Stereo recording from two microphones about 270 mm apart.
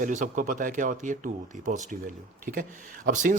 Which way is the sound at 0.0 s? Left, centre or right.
Right.